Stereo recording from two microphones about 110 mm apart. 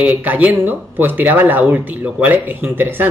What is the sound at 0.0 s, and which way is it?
Speech, 15° right (ahead or behind).